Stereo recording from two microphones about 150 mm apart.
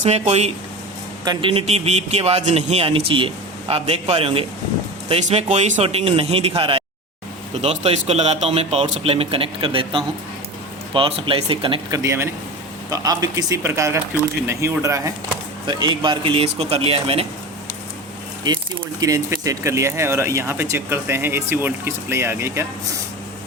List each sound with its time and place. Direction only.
0.0 s speech: 50° right (ahead or behind)
1.2 s a man's voice: 30° right (ahead or behind)
11.9 s speech: 20° right (ahead or behind)
15.6 s a man's voice: 35° right (ahead or behind)
18.4 s speech: 25° right (ahead or behind)